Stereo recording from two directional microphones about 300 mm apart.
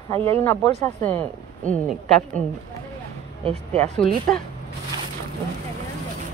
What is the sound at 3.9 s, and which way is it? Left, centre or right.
Speech, centre.